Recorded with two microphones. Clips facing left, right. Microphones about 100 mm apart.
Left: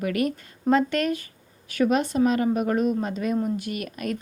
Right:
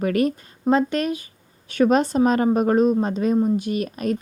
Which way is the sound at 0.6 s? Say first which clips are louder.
Right 2 dB; 20° right (ahead or behind).